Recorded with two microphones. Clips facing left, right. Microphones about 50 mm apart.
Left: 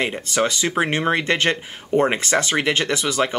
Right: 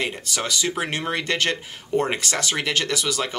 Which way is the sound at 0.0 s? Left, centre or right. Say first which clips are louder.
Left 6 dB; left.